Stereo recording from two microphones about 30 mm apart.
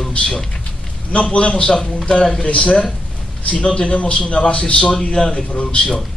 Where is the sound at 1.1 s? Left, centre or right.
Left.